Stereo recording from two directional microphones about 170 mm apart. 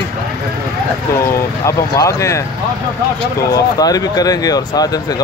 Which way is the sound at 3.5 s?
20° left (ahead or behind).